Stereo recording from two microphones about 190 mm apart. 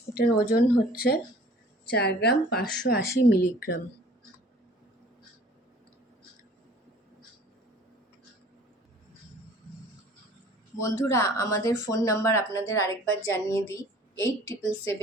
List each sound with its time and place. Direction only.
0.1 s a woman's voice: 55° left (ahead or behind)
10.8 s speech: 15° left (ahead or behind)